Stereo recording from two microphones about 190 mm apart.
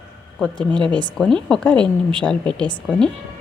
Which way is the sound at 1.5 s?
5° left (ahead or behind).